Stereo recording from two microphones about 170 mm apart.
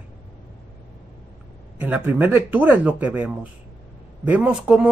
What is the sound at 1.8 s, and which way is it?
Speech, 10° right (ahead or behind).